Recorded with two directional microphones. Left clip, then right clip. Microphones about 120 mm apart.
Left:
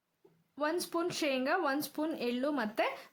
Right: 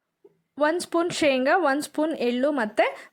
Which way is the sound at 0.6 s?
60° right (ahead or behind).